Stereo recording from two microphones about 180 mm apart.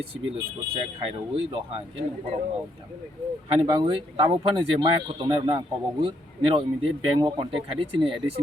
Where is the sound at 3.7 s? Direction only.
30° right (ahead or behind).